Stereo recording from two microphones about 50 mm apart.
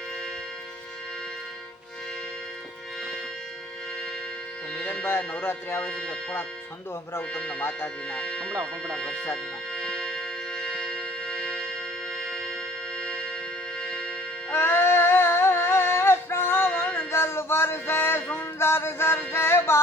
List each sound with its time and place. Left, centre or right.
5.0 s music: left
5.8 s speech: left
7.6 s music: left
8.1 s speech: left
9.3 s music: left
14.5 s a sound: left
16.6 s music: left
17.1 s music: left